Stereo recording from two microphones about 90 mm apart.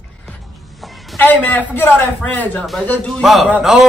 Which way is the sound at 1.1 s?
20° left (ahead or behind).